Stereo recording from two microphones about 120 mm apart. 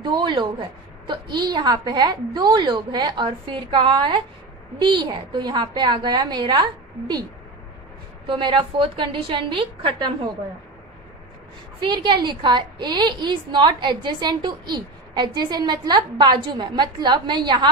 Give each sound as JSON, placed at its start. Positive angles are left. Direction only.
{"t": 0.0, "sound": "a woman's voice", "side_deg": -40}
{"t": 8.3, "sound": "a woman's voice", "side_deg": -45}
{"t": 11.8, "sound": "a woman's voice", "side_deg": -40}